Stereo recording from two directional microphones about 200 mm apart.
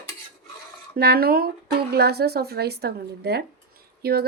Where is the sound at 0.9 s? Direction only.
50° right (ahead or behind).